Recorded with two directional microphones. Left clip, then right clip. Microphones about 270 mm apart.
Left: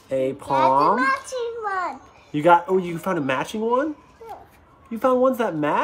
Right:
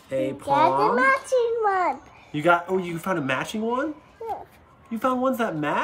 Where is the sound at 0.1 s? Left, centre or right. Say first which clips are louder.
Left 3 dB; centre.